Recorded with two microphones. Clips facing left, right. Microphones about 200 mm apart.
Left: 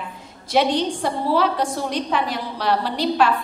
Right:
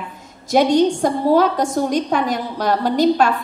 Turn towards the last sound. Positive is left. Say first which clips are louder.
# right 5 dB
turn(degrees=-45)  # may be behind; listen again after turning